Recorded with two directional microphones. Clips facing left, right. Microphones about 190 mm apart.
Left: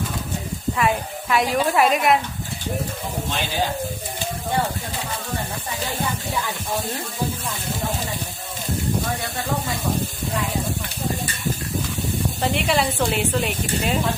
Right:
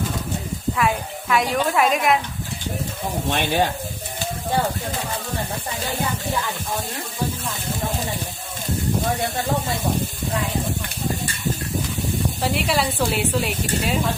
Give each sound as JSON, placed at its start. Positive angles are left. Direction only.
{"t": 0.8, "sound": "speech", "side_deg": 0}
{"t": 3.2, "sound": "speech", "side_deg": -60}
{"t": 12.4, "sound": "speech", "side_deg": 0}